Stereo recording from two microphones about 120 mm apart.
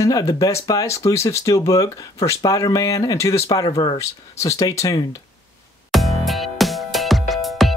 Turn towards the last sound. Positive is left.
turn(degrees=0)  # may be behind; listen again after turning